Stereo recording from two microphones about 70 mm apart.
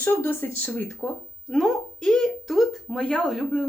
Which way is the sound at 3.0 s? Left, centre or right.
Centre.